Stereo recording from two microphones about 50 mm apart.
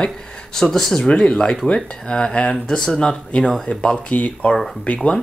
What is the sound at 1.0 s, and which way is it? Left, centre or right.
Speech, centre.